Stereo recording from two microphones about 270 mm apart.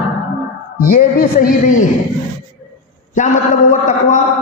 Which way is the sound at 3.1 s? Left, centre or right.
Left.